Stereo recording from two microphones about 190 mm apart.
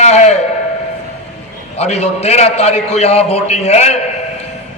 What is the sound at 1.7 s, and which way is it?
A man's voice, 35° left (ahead or behind).